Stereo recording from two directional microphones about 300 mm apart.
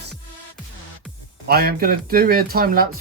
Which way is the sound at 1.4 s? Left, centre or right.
Right.